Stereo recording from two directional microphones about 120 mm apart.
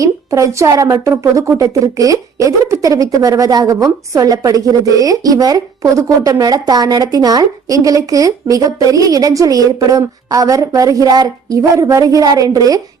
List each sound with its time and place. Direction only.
0.0 s speech: 25° right (ahead or behind)